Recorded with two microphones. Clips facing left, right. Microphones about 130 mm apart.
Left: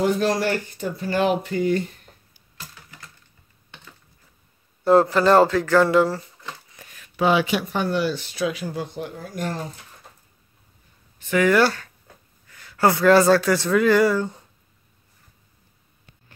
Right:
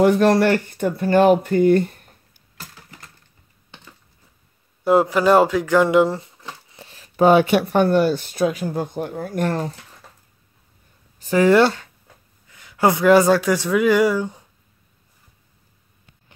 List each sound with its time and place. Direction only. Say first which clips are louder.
0.0 s speech: right 6 dB; 60° right (ahead or behind)
4.8 s speech: even; 10° right (ahead or behind)
6.7 s a sound: right 3 dB; 30° right (ahead or behind)
7.2 s speech: right 6 dB; 50° right (ahead or behind)
11.1 s speech: right 4 dB; 35° right (ahead or behind); by 14.4 s 15° right (ahead or behind)